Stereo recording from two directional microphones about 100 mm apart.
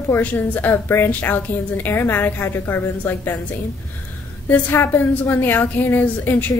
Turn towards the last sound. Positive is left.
turn(degrees=20)  # may be behind; listen again after turning